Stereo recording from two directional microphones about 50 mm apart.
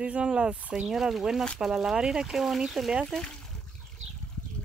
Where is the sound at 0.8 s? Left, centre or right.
Centre.